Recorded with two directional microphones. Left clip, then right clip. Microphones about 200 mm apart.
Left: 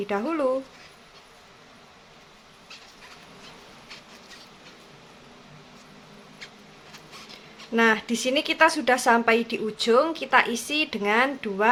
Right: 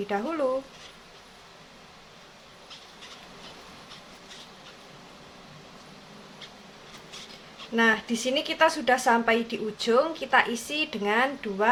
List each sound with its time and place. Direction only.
0.1 s speech: 15° left (ahead or behind)
7.8 s a woman's voice: 20° left (ahead or behind)